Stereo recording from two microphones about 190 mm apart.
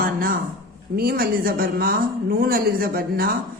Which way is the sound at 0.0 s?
50° right (ahead or behind).